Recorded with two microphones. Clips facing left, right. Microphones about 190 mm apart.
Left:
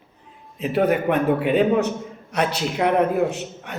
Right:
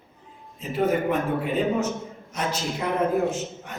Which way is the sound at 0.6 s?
70° left (ahead or behind).